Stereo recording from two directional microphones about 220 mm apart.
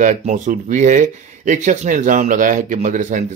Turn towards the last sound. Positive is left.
turn(degrees=-35)  # may be behind; listen again after turning